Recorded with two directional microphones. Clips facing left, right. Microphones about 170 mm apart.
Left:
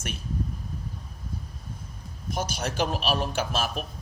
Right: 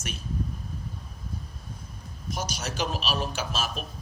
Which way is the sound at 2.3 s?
55° left (ahead or behind).